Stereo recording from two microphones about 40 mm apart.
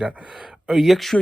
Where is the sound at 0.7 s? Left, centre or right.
Centre.